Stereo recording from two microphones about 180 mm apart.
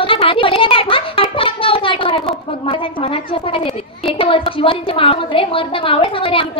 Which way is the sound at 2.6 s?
30° left (ahead or behind).